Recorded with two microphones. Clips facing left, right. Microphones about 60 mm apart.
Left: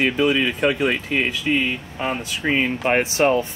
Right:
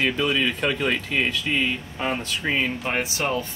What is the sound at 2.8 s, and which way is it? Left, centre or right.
Speech, left.